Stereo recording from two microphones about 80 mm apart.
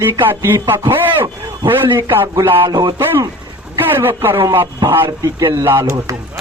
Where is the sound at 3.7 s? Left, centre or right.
Right.